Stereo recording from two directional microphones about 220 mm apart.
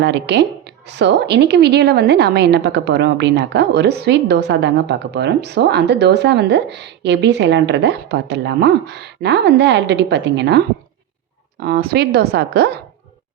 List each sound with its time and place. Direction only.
0.0 s a woman's voice: 50° right (ahead or behind)
11.6 s a woman's voice: 45° right (ahead or behind)